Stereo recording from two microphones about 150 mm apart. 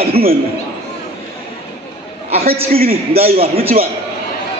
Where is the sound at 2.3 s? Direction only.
40° right (ahead or behind).